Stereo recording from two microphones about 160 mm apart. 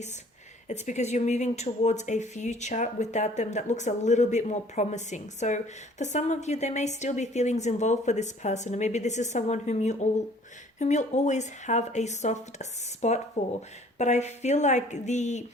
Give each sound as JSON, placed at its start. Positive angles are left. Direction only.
{"t": 0.7, "sound": "speech", "side_deg": 45}